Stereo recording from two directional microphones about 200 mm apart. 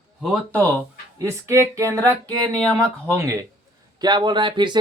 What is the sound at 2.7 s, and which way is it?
Speech, 15° right (ahead or behind).